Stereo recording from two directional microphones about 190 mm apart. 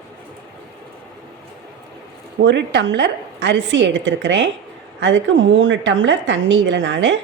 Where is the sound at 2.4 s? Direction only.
65° right (ahead or behind).